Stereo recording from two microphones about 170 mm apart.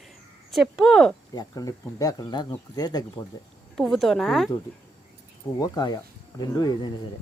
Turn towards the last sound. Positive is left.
turn(degrees=25)  # may be behind; listen again after turning